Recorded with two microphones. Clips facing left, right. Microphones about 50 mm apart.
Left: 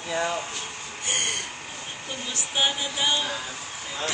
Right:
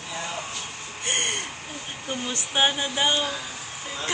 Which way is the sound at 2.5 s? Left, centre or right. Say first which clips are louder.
Right 3 dB; right.